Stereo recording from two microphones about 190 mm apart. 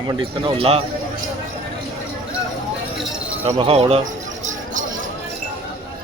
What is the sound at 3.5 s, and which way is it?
Speech, 25° right (ahead or behind).